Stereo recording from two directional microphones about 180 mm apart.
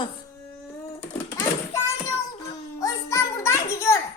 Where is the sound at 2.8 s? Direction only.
20° left (ahead or behind).